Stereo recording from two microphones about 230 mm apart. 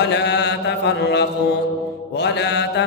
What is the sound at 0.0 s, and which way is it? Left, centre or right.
Chant, left.